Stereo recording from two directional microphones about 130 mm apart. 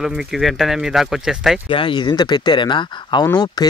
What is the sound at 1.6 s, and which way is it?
Speech, 40° left (ahead or behind).